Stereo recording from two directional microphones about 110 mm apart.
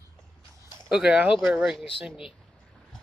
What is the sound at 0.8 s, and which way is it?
Speech, 10° right (ahead or behind).